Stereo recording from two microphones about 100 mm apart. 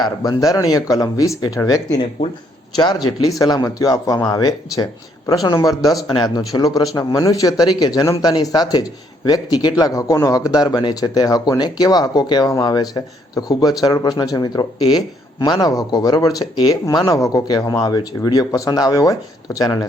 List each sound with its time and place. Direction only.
0.0 s speech: 40° left (ahead or behind)